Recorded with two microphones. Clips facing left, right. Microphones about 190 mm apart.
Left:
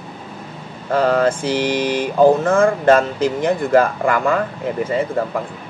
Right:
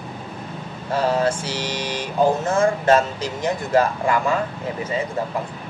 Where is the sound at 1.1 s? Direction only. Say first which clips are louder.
Left 5 dB; 55° left (ahead or behind).